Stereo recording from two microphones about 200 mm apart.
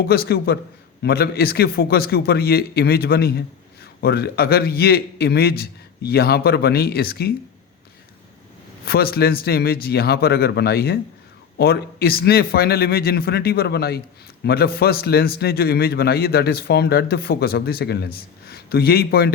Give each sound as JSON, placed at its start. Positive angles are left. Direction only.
{"t": 0.0, "sound": "a man's voice", "side_deg": 50}
{"t": 8.8, "sound": "a man's voice", "side_deg": 50}